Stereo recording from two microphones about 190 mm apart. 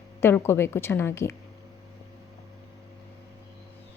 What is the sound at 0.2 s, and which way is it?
A woman's voice, 10° left (ahead or behind).